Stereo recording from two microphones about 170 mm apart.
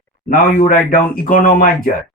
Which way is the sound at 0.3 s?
55° left (ahead or behind).